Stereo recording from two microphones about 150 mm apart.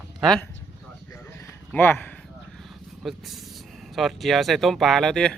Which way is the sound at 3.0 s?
Centre (ahead or behind).